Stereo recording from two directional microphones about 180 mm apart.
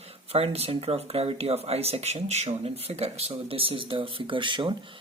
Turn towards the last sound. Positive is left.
turn(degrees=-30)  # may be behind; listen again after turning